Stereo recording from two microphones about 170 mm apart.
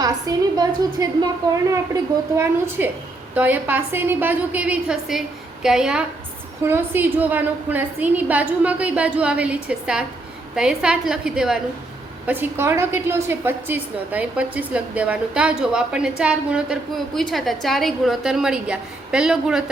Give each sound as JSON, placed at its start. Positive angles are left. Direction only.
{"t": 0.0, "sound": "a woman's voice", "side_deg": -20}